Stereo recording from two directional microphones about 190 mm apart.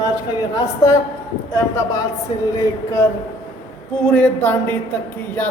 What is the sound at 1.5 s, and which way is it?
A woman's voice, 15° left (ahead or behind).